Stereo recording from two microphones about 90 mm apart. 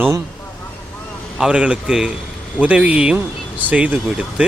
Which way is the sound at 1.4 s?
10° right (ahead or behind).